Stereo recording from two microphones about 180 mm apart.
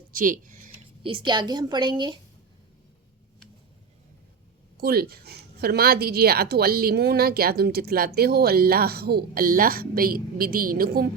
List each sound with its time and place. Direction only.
0.1 s a sound: 50° right (ahead or behind)
0.7 s speech: 30° right (ahead or behind)
4.8 s a woman's voice: 60° right (ahead or behind)